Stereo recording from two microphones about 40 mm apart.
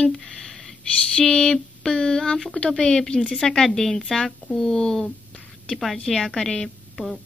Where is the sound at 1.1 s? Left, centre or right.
Left.